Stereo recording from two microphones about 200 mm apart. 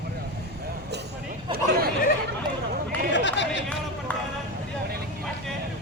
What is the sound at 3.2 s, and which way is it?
Run, 65° left (ahead or behind).